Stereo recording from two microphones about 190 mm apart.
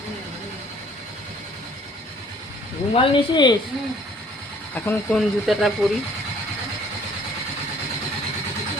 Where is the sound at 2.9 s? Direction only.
25° left (ahead or behind).